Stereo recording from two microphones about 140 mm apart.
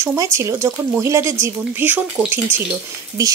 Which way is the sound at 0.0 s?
20° right (ahead or behind).